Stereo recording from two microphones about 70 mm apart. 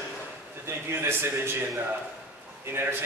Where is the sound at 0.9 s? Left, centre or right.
Right.